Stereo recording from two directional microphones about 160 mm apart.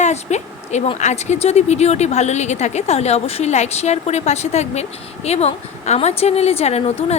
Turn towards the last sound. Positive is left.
turn(degrees=35)  # may be behind; listen again after turning